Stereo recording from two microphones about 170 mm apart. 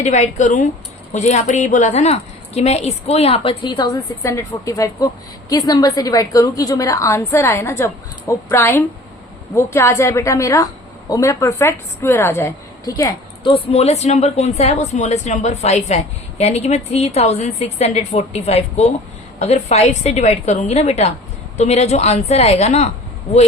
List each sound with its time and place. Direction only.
0.0 s a woman's voice: 40° left (ahead or behind); by 13.5 s 20° left (ahead or behind)
13.5 s a woman's voice: 40° left (ahead or behind)